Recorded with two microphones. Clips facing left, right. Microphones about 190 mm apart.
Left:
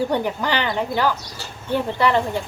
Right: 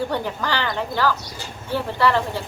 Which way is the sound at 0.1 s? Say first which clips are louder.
Left 3 dB; 15° left (ahead or behind).